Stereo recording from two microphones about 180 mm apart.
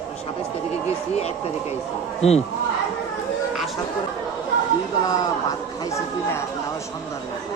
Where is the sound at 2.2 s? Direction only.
35° left (ahead or behind).